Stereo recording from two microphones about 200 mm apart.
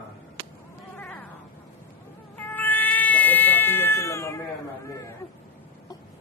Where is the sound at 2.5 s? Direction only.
10° left (ahead or behind).